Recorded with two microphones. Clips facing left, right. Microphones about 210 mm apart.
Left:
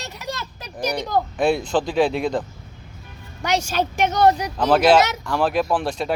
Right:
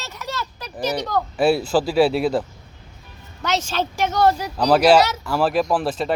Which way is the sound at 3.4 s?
10° left (ahead or behind).